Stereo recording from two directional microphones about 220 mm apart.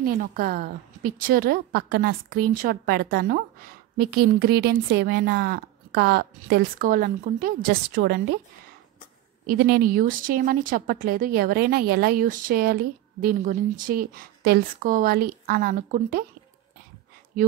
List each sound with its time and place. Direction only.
0.0 s a woman's voice: 40° right (ahead or behind)
9.5 s speech: 40° right (ahead or behind)